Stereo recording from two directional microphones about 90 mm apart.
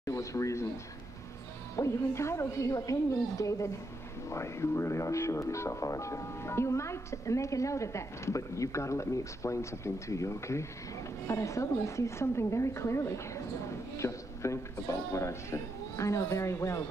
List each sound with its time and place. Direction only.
0.0 s speech: 35° left (ahead or behind)
1.8 s speech: 30° left (ahead or behind)